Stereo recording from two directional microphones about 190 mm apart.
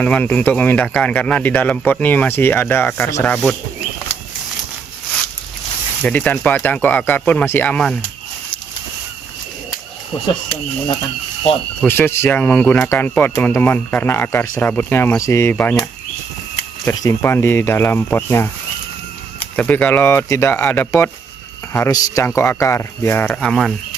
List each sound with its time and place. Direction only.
0.0 s speech: 5° left (ahead or behind)
6.0 s speech: 5° left (ahead or behind)
11.8 s speech: 10° left (ahead or behind)
16.8 s speech: 15° left (ahead or behind)
19.5 s speech: 5° left (ahead or behind)